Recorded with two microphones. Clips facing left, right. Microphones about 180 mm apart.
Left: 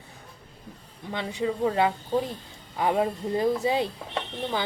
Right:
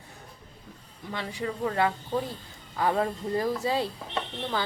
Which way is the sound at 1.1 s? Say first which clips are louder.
Left 4 dB; 20° left (ahead or behind).